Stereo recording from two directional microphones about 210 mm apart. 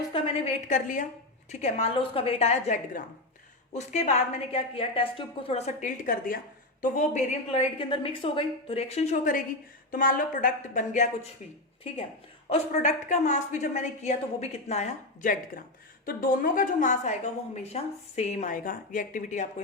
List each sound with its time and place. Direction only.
0.7 s a woman's voice: 40° left (ahead or behind)
12.5 s a woman's voice: 30° left (ahead or behind)